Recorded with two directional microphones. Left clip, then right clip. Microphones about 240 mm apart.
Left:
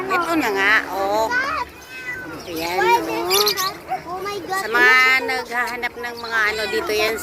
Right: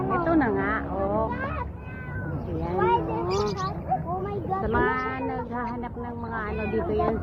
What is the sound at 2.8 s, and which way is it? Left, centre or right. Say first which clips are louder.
Bird: left 6 dB; left.